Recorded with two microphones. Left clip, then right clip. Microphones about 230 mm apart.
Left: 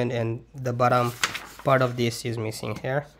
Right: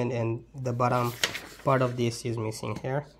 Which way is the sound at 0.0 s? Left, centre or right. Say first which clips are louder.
Left 3 dB; centre.